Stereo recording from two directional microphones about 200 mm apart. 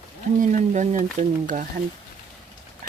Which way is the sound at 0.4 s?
35° right (ahead or behind).